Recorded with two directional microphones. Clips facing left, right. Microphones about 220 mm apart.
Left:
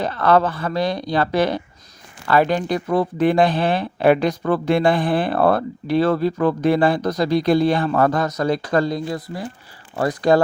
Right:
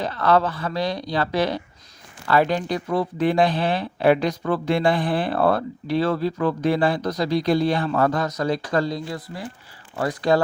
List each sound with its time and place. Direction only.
0.0 s speech: 55° left (ahead or behind)